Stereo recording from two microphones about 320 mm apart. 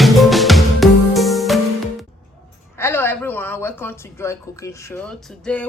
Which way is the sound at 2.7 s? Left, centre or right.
Centre.